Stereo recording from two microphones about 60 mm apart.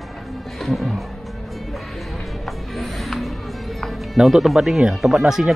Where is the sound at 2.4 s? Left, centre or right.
Centre.